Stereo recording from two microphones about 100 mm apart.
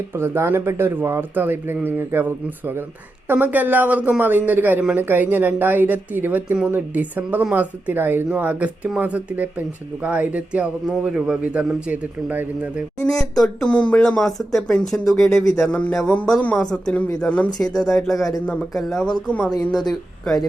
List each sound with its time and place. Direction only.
0.1 s speech: 25° right (ahead or behind)
13.0 s speech: 5° left (ahead or behind)